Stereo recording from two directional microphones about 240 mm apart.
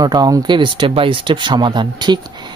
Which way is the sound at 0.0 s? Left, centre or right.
Centre.